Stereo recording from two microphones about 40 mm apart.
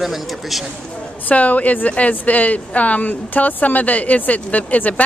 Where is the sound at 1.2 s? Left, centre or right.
Left.